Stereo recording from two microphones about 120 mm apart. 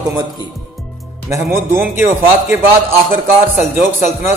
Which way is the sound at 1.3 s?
20° right (ahead or behind).